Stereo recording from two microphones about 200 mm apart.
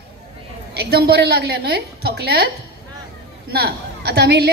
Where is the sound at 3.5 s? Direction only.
50° right (ahead or behind).